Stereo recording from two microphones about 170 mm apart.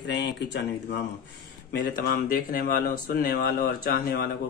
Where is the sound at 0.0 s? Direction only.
90° left.